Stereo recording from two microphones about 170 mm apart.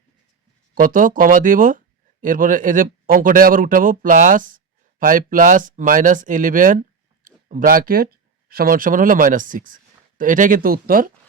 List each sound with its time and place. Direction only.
0.7 s a man's voice: 55° right (ahead or behind)